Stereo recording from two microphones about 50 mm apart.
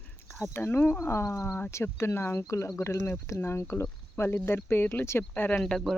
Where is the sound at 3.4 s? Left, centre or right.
Left.